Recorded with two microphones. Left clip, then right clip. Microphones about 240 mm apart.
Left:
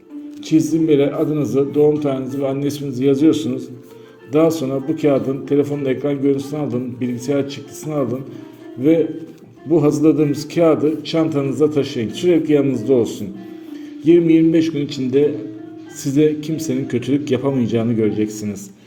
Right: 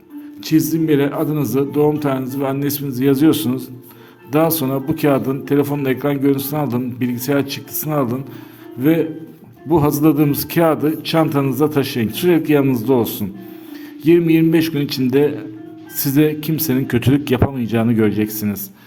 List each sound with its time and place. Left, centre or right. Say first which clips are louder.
0.4 s a man's voice: left 1 dB; right